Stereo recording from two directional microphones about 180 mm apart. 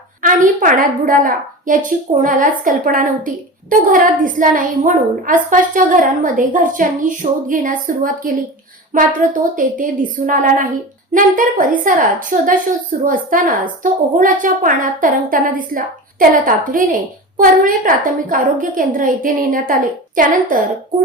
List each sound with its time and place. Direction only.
0.2 s a woman's voice: 45° right (ahead or behind)